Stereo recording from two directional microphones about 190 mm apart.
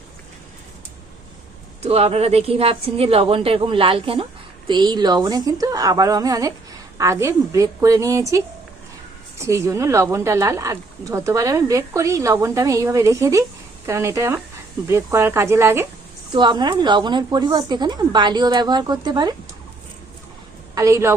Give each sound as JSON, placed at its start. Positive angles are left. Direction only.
{"t": 1.8, "sound": "a woman's voice", "side_deg": -30}
{"t": 9.4, "sound": "speech", "side_deg": -15}
{"t": 20.7, "sound": "speech", "side_deg": -15}